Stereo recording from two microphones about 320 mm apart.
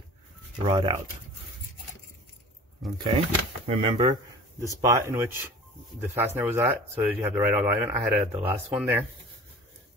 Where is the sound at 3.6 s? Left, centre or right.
Centre.